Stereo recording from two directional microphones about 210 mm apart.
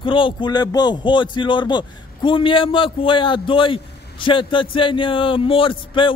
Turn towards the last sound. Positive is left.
turn(degrees=25)  # may be behind; listen again after turning